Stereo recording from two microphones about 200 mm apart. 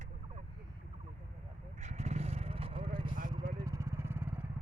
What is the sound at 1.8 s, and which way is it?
Vehicle, 35° right (ahead or behind).